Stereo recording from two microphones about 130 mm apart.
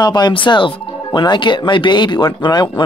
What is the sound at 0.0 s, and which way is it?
Speech, 35° left (ahead or behind).